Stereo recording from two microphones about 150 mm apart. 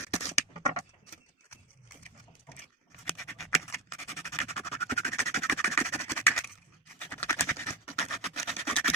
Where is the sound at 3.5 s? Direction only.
20° left (ahead or behind).